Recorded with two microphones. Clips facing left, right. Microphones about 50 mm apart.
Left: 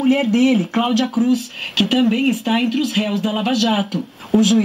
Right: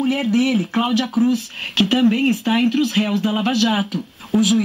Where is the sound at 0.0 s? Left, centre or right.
Left.